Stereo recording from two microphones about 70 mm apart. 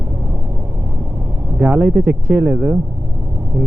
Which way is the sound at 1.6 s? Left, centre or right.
Centre.